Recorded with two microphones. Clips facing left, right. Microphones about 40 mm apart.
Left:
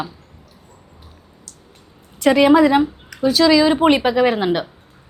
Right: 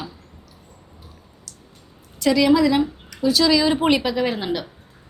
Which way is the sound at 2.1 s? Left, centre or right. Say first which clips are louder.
Left 4 dB; left.